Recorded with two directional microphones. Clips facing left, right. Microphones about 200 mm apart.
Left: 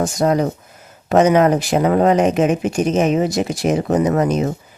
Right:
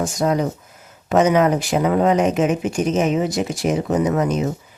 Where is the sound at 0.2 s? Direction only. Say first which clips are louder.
Left 2 dB; 40° left (ahead or behind).